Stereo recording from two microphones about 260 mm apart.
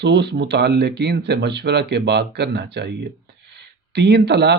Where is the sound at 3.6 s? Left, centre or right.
Right.